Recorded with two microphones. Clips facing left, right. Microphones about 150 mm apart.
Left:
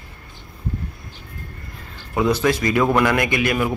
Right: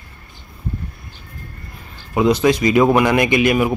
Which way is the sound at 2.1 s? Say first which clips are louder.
Right 4 dB; 20° right (ahead or behind).